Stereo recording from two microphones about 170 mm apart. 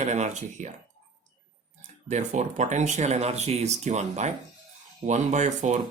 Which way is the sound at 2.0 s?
45° right (ahead or behind).